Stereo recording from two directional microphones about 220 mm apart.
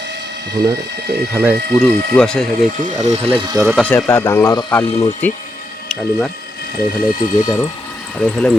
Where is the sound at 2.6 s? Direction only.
35° right (ahead or behind).